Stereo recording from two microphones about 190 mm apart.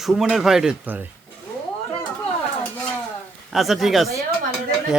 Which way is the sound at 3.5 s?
Centre (ahead or behind).